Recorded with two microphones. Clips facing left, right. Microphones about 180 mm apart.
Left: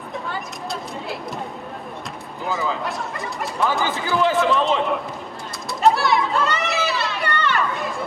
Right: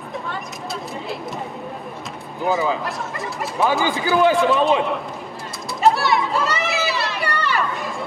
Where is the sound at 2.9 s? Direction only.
Centre (ahead or behind).